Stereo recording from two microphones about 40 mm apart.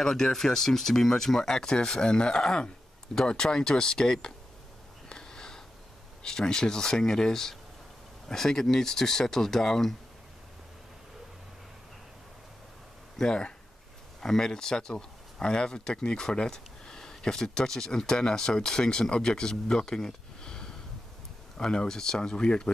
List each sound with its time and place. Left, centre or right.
0.0 s speech: centre
5.1 s sniff: centre
6.2 s speech: centre
13.2 s speech: centre
19.5 s a sound: centre
21.5 s speech: centre